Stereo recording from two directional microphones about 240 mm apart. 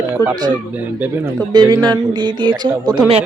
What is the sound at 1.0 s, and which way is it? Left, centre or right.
Speech, centre.